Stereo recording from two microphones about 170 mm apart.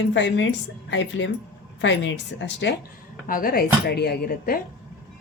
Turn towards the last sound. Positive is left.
turn(degrees=65)  # may be behind; listen again after turning